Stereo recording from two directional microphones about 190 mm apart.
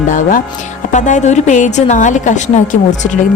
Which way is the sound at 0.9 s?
40° left (ahead or behind).